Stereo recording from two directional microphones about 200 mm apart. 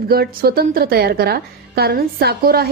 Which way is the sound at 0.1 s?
50° right (ahead or behind).